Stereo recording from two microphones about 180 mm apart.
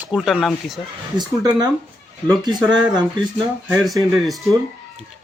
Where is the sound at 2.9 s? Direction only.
20° right (ahead or behind).